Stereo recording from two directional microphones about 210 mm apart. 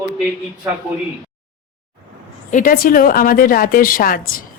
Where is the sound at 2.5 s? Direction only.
40° left (ahead or behind).